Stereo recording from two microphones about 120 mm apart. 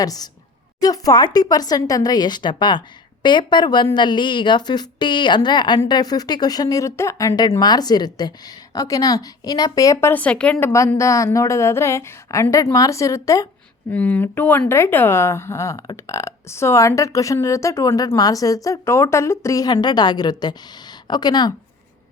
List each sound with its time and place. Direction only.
0.0 s speech: 30° left (ahead or behind); by 10.7 s 10° left (ahead or behind)
10.7 s speech: 25° left (ahead or behind)
13.9 s speech: 15° left (ahead or behind); by 21.5 s 35° left (ahead or behind)